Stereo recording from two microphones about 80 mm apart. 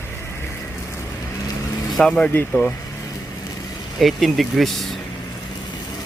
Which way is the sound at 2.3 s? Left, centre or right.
Left.